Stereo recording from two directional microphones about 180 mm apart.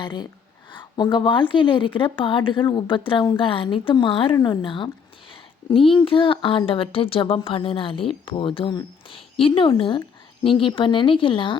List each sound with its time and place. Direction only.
0.0 s a woman's voice: 25° left (ahead or behind)